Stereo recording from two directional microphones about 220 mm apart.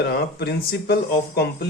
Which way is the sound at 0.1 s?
45° left (ahead or behind).